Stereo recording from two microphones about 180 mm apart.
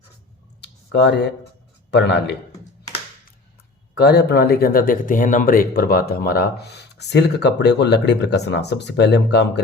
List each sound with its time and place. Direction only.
0.6 s clicking: 80° left
1.9 s speech: 75° left (ahead or behind)
3.9 s speech: 65° left (ahead or behind)